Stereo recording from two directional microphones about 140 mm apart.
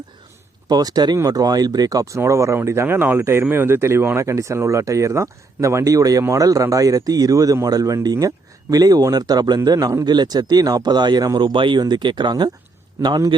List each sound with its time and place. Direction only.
0.7 s speech: 30° right (ahead or behind)